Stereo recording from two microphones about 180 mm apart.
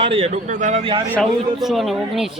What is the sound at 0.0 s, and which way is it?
A man's voice, 30° right (ahead or behind).